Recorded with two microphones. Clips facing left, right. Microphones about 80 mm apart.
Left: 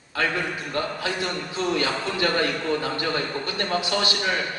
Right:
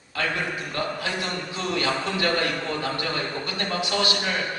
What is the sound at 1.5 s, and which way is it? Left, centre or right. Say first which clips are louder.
A man's voice: left 1 dB; left.